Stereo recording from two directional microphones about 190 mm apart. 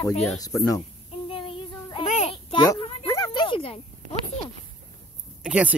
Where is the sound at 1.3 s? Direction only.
30° left (ahead or behind).